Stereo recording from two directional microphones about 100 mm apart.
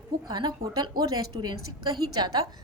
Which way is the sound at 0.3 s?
45° right (ahead or behind).